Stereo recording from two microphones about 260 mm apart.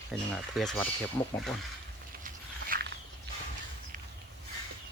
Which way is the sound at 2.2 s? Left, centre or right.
Right.